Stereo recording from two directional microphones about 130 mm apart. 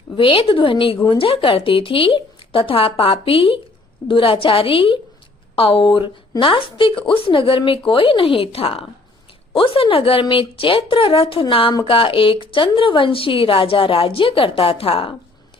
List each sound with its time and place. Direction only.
0.2 s a woman's voice: 45° left (ahead or behind)